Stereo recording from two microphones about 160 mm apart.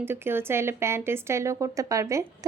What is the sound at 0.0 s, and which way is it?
Speech, 15° right (ahead or behind).